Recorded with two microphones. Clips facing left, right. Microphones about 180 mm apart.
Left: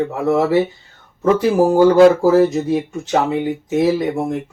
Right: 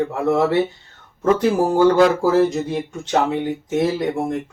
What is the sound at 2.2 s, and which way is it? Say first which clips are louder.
Speech: left 3 dB; centre (ahead or behind).